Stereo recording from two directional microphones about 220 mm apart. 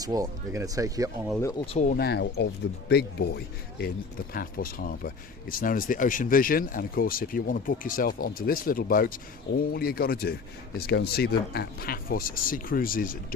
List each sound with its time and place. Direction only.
0.0 s speech: 15° right (ahead or behind)
1.4 s speech: 15° left (ahead or behind)
1.6 s speech: 30° left (ahead or behind)